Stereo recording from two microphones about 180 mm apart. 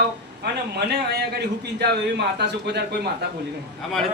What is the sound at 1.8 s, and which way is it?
Speech, 70° right (ahead or behind).